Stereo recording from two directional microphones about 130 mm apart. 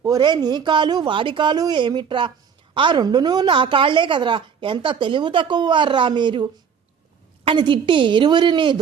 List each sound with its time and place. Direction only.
0.0 s a woman's voice: 30° right (ahead or behind)